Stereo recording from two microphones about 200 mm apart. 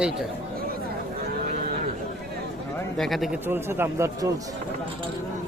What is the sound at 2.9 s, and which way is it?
Speech, centre (ahead or behind).